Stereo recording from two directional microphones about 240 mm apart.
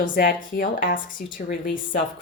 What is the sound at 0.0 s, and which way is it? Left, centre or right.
A woman's voice, left.